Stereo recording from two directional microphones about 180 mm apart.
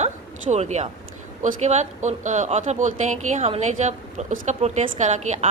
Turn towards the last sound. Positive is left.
turn(degrees=-40)  # may be behind; listen again after turning